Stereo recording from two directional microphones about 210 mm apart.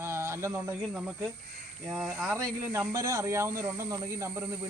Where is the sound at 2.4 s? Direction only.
15° right (ahead or behind).